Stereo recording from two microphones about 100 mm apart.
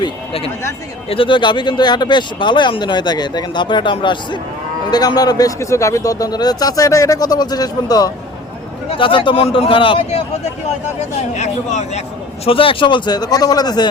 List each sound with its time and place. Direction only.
1.1 s speech: 60° left (ahead or behind)
4.9 s a man's voice: 40° left (ahead or behind)
8.9 s a man's voice: 60° left (ahead or behind)
12.5 s speech: 65° left (ahead or behind); by 13.9 s 45° left (ahead or behind)